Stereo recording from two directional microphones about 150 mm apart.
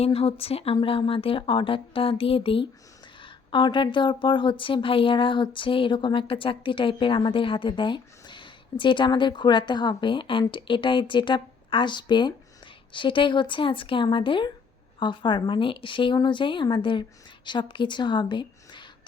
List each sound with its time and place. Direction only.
0.0 s a woman's voice: 40° left (ahead or behind)